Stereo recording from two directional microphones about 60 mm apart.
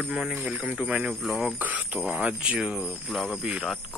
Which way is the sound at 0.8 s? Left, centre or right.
Right.